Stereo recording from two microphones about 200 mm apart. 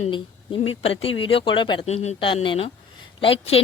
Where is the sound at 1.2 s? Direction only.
25° left (ahead or behind).